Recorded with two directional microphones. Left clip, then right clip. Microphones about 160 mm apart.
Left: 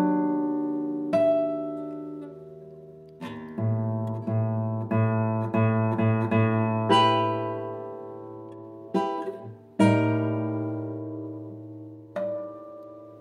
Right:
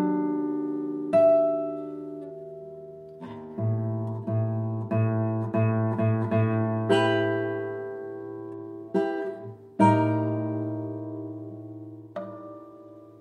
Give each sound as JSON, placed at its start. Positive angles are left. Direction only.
{"t": 0.0, "sound": "music", "side_deg": 25}
{"t": 1.4, "sound": "music", "side_deg": 35}
{"t": 3.5, "sound": "music", "side_deg": 20}